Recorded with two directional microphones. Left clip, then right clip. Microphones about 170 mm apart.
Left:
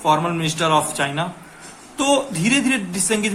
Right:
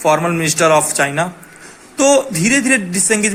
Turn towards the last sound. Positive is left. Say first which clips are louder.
# right 5 dB
turn(degrees=-25)  # may be behind; listen again after turning